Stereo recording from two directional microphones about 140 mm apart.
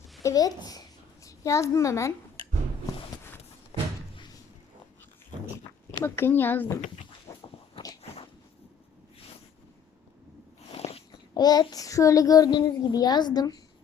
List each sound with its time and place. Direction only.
0.2 s a woman's voice: 25° left (ahead or behind)
3.7 s door: 45° left (ahead or behind)
5.9 s speech: 20° left (ahead or behind)
7.3 s walk: 25° left (ahead or behind)
10.8 s a sound: 45° left (ahead or behind)
11.3 s a child's voice: 30° left (ahead or behind)